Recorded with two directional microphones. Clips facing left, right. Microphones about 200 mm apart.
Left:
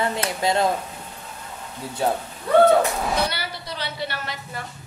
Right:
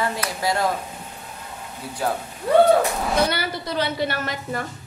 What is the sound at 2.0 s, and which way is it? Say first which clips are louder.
Speech: left 2 dB; 25° left (ahead or behind).